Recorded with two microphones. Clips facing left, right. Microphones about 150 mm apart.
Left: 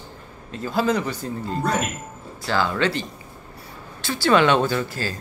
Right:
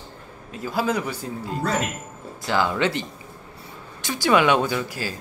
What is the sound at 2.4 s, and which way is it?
Speech, 15° right (ahead or behind).